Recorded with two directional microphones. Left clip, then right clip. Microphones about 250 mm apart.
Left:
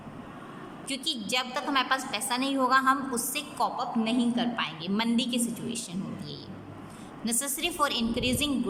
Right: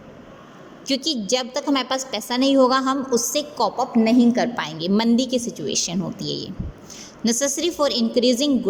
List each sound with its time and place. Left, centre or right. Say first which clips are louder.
0.9 s a woman's voice: right 9 dB; right